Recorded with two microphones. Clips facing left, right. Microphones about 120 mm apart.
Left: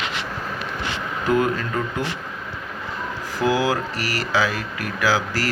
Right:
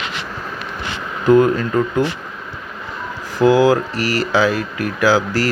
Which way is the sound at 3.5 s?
35° right (ahead or behind).